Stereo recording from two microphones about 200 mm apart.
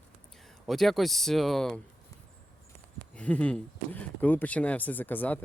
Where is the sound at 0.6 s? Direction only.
Centre (ahead or behind).